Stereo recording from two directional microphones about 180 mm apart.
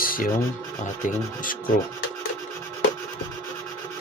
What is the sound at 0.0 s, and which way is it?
Music, 50° left (ahead or behind).